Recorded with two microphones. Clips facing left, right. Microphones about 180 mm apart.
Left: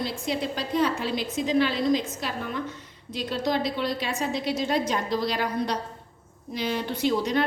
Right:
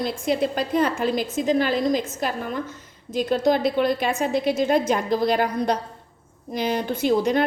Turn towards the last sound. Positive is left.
turn(degrees=-50)  # may be behind; listen again after turning